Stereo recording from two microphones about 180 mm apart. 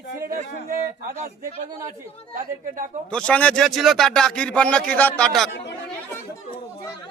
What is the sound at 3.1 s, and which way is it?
Speech, 5° left (ahead or behind).